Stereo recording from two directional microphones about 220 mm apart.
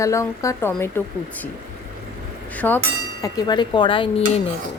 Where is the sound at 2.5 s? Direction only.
5° left (ahead or behind).